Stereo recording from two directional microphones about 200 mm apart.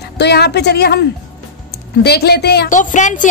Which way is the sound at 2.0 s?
55° left (ahead or behind).